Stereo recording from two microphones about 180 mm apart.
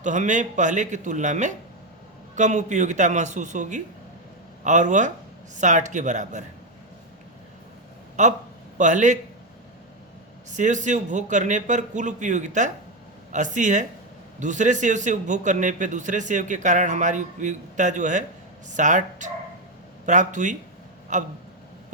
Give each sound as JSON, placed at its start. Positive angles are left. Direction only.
{"t": 0.0, "sound": "a man's voice", "side_deg": -45}
{"t": 8.2, "sound": "a man's voice", "side_deg": -40}
{"t": 10.5, "sound": "a man's voice", "side_deg": -45}